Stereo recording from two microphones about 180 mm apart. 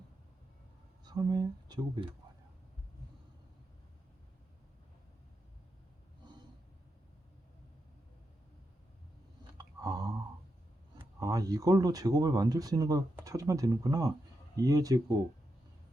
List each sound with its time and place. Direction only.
1.0 s speech: 25° right (ahead or behind)
9.6 s a sound: 20° right (ahead or behind)
10.9 s speech: 20° right (ahead or behind)